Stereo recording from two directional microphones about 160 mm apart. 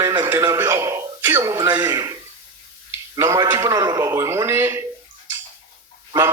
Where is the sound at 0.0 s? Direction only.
25° right (ahead or behind).